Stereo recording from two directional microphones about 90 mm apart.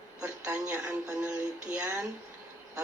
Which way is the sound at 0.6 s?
20° right (ahead or behind).